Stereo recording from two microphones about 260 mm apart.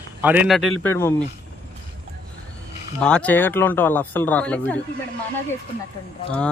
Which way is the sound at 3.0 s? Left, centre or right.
Centre.